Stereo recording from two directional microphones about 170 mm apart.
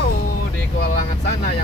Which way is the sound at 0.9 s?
55° left (ahead or behind).